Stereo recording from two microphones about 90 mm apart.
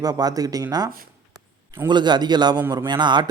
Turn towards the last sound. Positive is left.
turn(degrees=-55)  # may be behind; listen again after turning